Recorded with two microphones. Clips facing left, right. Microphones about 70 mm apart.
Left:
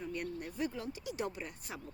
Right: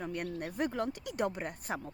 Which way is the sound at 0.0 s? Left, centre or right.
Right.